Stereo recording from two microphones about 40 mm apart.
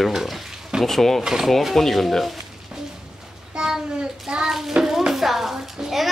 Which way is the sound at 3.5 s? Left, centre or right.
Centre.